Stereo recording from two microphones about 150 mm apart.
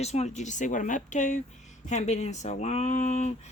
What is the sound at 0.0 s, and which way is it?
Speech, 45° left (ahead or behind).